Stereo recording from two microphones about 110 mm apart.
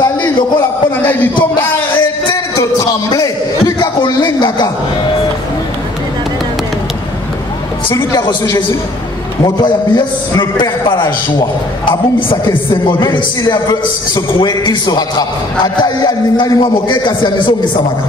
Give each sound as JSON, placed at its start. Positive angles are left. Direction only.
{"t": 0.0, "sound": "a sound", "side_deg": 40}
{"t": 2.5, "sound": "a man's voice", "side_deg": 30}
{"t": 7.9, "sound": "a man's voice", "side_deg": 30}